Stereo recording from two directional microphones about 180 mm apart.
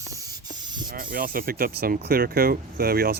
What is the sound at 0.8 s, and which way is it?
Speech, 50° right (ahead or behind).